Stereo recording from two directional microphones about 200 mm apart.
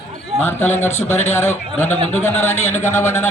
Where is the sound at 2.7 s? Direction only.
10° left (ahead or behind).